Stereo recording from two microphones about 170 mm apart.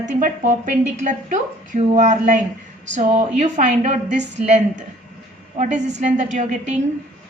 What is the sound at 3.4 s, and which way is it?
A woman's voice, 45° right (ahead or behind).